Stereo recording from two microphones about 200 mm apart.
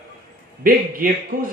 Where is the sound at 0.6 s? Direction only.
45° right (ahead or behind).